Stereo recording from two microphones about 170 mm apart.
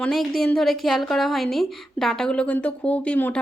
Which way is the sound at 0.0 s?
Centre (ahead or behind).